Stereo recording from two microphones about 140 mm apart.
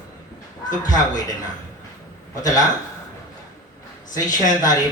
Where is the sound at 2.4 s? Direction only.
25° left (ahead or behind).